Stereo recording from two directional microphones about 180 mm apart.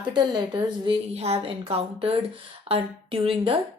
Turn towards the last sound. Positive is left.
turn(degrees=-30)  # may be behind; listen again after turning